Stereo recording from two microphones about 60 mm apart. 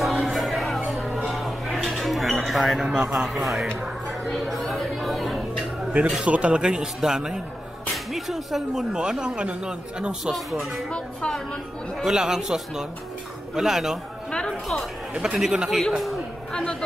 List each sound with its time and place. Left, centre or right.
0.0 s a sound: centre
3.0 s speech: centre
6.2 s speech: right
6.6 s speech: centre
8.9 s speech: centre
10.2 s speech: centre
12.0 s speech: centre
15.3 s speech: centre